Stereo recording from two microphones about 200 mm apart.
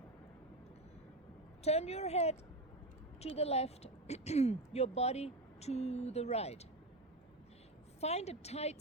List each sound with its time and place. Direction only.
1.6 s a woman's voice: 30° left (ahead or behind)
8.0 s a woman's voice: 30° left (ahead or behind)